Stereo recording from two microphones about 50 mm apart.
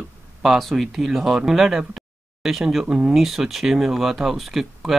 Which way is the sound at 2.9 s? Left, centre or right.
Centre.